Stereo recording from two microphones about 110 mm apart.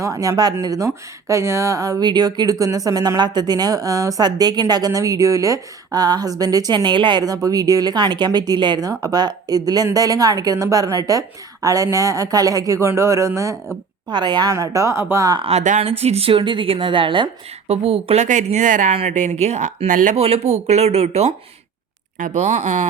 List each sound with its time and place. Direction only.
0.0 s a woman's voice: 30° right (ahead or behind)
14.1 s a woman's voice: 40° right (ahead or behind)
14.5 s speech: 30° right (ahead or behind)
15.4 s a woman's voice: 65° right (ahead or behind); by 17.2 s 50° right (ahead or behind)
17.7 s speech: 65° right (ahead or behind)
22.3 s speech: 90° right